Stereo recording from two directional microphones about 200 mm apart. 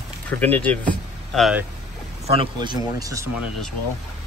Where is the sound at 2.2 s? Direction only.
25° right (ahead or behind).